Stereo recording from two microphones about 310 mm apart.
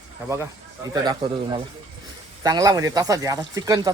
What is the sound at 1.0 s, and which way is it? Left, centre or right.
Speech, centre.